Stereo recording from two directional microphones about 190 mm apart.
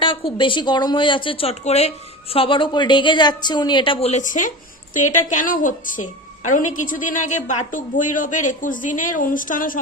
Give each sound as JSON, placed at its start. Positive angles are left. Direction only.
{"t": 0.0, "sound": "a woman's voice", "side_deg": 25}